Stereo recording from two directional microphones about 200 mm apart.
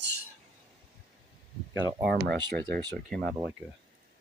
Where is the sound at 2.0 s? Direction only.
60° right (ahead or behind).